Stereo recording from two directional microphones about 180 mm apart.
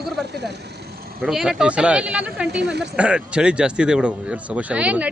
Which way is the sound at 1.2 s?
5° right (ahead or behind).